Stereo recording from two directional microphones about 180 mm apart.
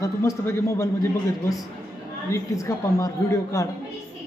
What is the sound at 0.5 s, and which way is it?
Speech, 15° left (ahead or behind).